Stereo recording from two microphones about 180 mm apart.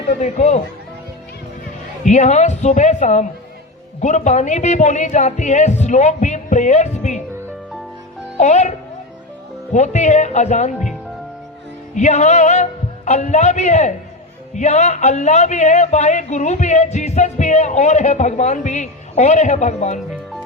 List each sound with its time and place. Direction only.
0.2 s a man's voice: 40° left (ahead or behind)
2.0 s a man's voice: 40° left (ahead or behind)
8.4 s a man's voice: 40° left (ahead or behind)
9.7 s a man's voice: 40° left (ahead or behind)
11.9 s a man's voice: 40° left (ahead or behind)